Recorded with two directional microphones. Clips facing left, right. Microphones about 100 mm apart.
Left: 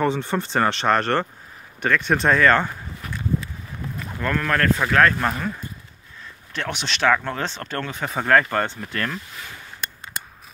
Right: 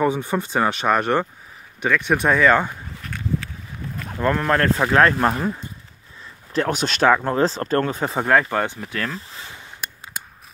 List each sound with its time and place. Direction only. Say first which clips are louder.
0.0 s speech: right 1 dB; 10° right (ahead or behind)
4.2 s speech: right 3 dB; 25° right (ahead or behind)
6.5 s speech: right 7 dB; 40° right (ahead or behind)
7.1 s speech: right 4 dB; 25° right (ahead or behind)
8.2 s speech: even; 10° right (ahead or behind)
9.3 s a sound: even; 25° right (ahead or behind)
9.8 s a sound: left 1 dB; 5° right (ahead or behind)